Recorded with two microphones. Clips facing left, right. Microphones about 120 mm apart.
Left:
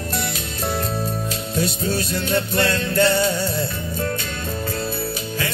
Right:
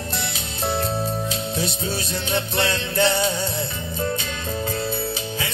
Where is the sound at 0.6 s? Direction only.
25° right (ahead or behind).